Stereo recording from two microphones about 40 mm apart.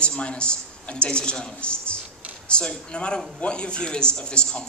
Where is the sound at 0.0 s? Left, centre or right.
Left.